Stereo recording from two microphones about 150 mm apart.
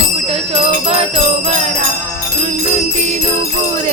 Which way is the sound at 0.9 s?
45° right (ahead or behind).